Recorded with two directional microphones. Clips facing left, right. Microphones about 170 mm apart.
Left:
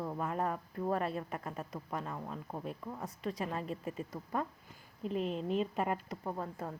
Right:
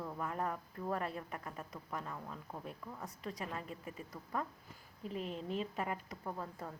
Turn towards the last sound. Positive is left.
turn(degrees=30)  # may be behind; listen again after turning